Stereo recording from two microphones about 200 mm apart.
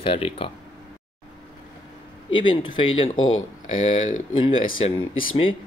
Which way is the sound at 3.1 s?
80° left.